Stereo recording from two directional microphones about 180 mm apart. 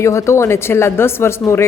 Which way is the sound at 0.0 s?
15° left (ahead or behind).